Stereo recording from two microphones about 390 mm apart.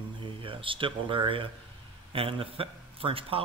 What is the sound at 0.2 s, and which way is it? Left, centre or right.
Speech, centre.